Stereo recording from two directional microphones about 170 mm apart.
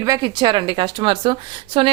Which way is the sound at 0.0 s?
25° right (ahead or behind).